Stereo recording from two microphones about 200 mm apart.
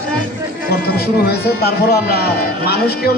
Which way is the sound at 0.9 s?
50° left (ahead or behind).